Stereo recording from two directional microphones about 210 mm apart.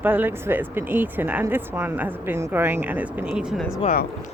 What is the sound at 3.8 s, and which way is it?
Speech, 40° left (ahead or behind).